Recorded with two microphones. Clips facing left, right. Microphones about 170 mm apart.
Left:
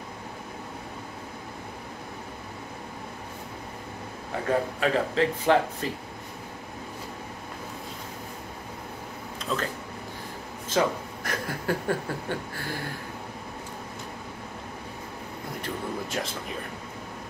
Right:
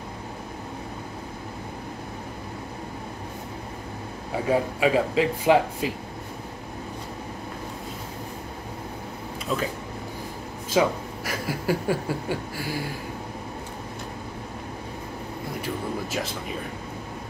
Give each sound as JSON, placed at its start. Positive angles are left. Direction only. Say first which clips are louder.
{"t": 4.5, "sound": "speech", "louder": "right 3 dB", "side_deg": -10}
{"t": 9.5, "sound": "speech", "louder": "right 3 dB", "side_deg": -5}
{"t": 10.7, "sound": "speech", "louder": "right 3 dB", "side_deg": -10}
{"t": 15.6, "sound": "speech", "louder": "right 2 dB", "side_deg": -5}